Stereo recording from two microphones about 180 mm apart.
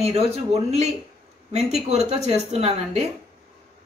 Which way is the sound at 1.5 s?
35° right (ahead or behind).